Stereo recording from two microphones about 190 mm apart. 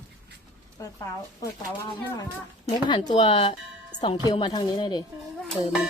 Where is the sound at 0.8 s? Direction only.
15° left (ahead or behind).